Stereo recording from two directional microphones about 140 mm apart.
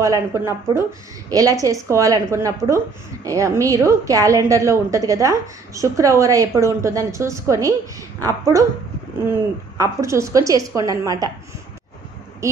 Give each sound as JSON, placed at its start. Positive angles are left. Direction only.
{"t": 0.0, "sound": "a woman's voice", "side_deg": -20}